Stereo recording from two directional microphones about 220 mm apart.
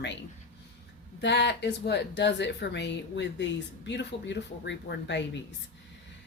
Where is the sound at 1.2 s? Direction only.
50° left (ahead or behind).